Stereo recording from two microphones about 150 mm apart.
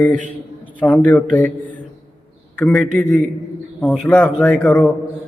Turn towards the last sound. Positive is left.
turn(degrees=5)  # may be behind; listen again after turning